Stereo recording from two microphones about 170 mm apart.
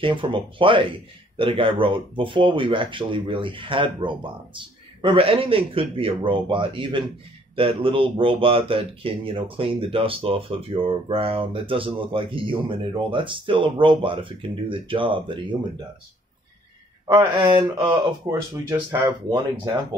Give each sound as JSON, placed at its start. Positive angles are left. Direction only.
{"t": 0.0, "sound": "speech", "side_deg": -30}
{"t": 17.3, "sound": "speech", "side_deg": -25}